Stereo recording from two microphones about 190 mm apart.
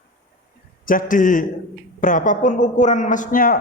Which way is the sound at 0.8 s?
45° left (ahead or behind).